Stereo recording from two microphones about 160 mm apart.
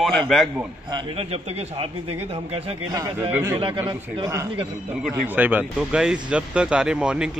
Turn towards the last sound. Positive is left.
turn(degrees=-5)  # may be behind; listen again after turning